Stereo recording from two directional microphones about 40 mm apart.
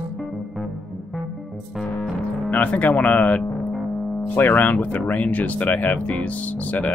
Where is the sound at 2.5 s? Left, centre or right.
Left.